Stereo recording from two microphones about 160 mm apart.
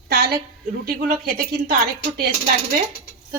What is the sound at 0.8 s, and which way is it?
Speech, 65° right (ahead or behind).